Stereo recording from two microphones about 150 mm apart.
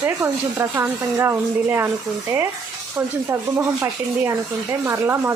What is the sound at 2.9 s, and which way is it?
Speech, 15° right (ahead or behind).